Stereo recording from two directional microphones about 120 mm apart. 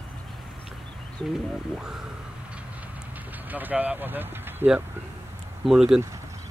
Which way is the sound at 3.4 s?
15° right (ahead or behind).